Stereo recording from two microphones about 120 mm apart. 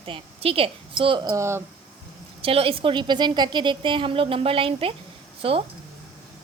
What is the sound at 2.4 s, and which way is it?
A woman's voice, 50° right (ahead or behind).